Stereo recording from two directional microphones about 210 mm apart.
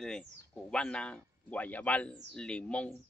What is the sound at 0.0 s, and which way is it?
Speech, 5° left (ahead or behind).